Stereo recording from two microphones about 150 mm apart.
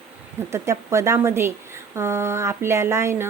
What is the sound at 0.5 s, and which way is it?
Speech, 20° right (ahead or behind).